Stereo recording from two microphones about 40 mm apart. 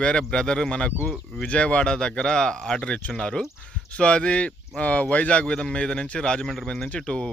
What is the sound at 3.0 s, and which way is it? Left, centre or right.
Speech, left.